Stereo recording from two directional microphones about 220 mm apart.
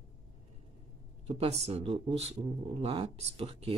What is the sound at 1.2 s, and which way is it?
Speech, 30° right (ahead or behind).